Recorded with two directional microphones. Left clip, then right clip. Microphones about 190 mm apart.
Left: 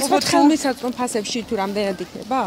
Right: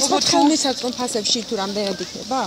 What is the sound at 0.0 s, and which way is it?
Speech, 30° left (ahead or behind).